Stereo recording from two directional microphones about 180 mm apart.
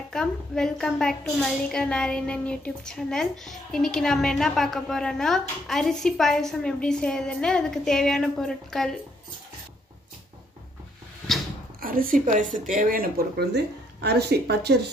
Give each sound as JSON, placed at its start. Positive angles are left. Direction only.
{"t": 0.1, "sound": "a woman's voice", "side_deg": 5}
{"t": 11.8, "sound": "a woman's voice", "side_deg": -50}